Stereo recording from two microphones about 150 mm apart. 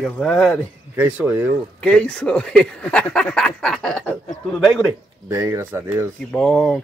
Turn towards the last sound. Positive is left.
turn(degrees=5)  # may be behind; listen again after turning